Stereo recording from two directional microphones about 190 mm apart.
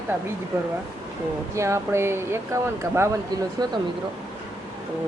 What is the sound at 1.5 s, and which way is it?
Speech, 15° right (ahead or behind).